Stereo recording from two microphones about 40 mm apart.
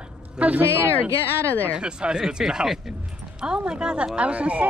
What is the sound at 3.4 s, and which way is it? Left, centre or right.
Speech, right.